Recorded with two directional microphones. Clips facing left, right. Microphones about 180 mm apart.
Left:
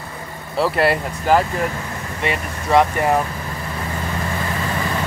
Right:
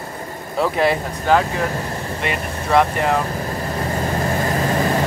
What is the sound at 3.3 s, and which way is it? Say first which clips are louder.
Vehicle: right 5 dB; 40° right (ahead or behind).